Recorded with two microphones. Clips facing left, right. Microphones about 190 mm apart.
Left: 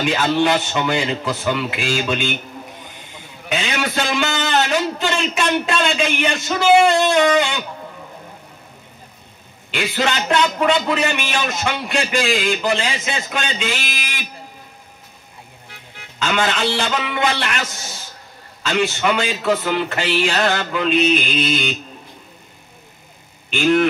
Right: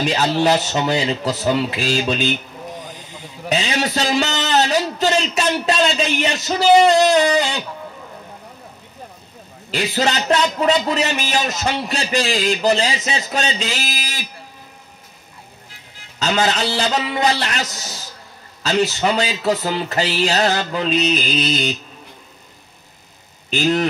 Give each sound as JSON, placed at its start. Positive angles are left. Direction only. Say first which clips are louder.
{"t": 0.0, "sound": "a man's voice", "louder": "even", "side_deg": -40}
{"t": 3.4, "sound": "a man's voice", "louder": "right 2 dB", "side_deg": -35}
{"t": 4.5, "sound": "a sound", "louder": "right 2 dB", "side_deg": -35}
{"t": 4.9, "sound": "a man's voice", "louder": "right 3 dB", "side_deg": -40}
{"t": 9.7, "sound": "a man's voice", "louder": "right 1 dB", "side_deg": -35}
{"t": 16.2, "sound": "a man's voice", "louder": "right 1 dB", "side_deg": -40}